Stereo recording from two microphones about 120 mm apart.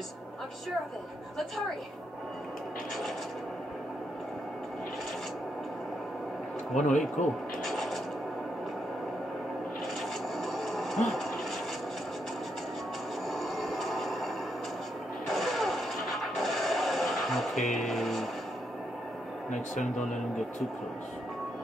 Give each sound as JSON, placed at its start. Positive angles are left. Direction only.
{"t": 6.7, "sound": "a man's voice", "side_deg": 80}
{"t": 7.6, "sound": "scratch", "side_deg": 0}
{"t": 10.3, "sound": "television", "side_deg": 0}
{"t": 13.3, "sound": "a sound", "side_deg": 0}
{"t": 15.3, "sound": "a sound", "side_deg": 0}
{"t": 16.3, "sound": "music", "side_deg": 0}
{"t": 19.5, "sound": "speech", "side_deg": 90}